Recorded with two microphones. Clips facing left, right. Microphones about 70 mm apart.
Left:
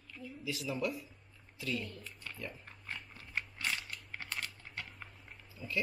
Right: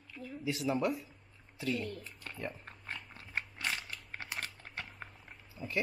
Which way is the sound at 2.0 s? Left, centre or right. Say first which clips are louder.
Right 3 dB; right.